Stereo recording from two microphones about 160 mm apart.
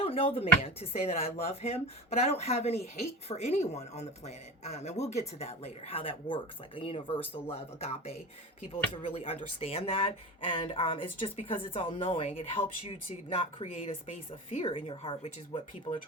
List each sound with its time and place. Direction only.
0.0 s speech: 40° left (ahead or behind)